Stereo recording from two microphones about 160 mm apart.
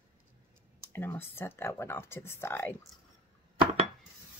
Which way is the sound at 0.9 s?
15° left (ahead or behind).